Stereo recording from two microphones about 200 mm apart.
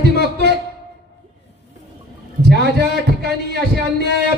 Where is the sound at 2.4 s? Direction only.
55° right (ahead or behind).